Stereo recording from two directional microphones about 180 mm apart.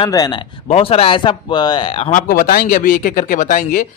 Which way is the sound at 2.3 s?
50° left (ahead or behind).